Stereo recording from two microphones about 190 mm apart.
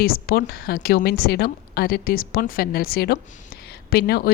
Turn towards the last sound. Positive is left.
turn(degrees=55)  # may be behind; listen again after turning